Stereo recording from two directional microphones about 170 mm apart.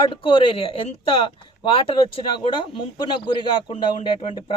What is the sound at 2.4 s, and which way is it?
A man's voice, 30° left (ahead or behind).